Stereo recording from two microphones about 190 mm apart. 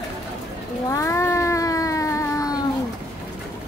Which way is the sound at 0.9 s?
15° left (ahead or behind).